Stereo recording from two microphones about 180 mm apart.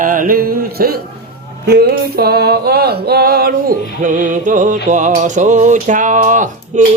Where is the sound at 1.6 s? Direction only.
60° right (ahead or behind).